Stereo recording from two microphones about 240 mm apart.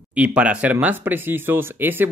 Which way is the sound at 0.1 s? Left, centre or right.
Centre.